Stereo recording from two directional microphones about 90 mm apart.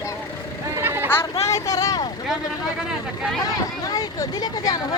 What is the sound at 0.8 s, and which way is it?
Vehicle, 25° right (ahead or behind).